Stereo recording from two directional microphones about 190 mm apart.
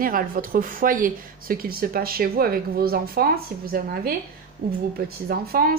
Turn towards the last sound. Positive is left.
turn(degrees=-50)  # may be behind; listen again after turning